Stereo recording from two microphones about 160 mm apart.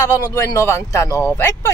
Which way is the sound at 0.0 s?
15° left (ahead or behind).